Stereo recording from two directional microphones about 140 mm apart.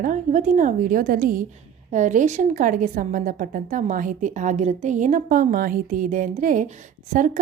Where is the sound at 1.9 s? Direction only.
60° right (ahead or behind).